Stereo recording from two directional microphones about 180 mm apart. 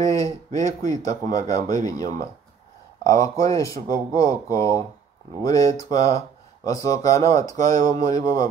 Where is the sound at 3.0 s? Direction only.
20° left (ahead or behind).